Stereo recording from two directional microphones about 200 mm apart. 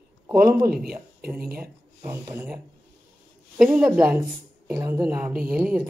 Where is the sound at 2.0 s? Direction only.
20° right (ahead or behind).